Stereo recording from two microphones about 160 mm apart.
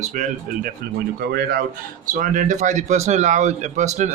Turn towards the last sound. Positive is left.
turn(degrees=-50)  # may be behind; listen again after turning